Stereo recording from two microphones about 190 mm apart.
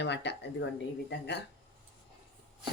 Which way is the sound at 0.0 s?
65° left (ahead or behind).